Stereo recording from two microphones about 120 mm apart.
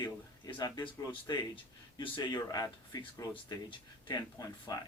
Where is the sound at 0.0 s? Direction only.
35° left (ahead or behind).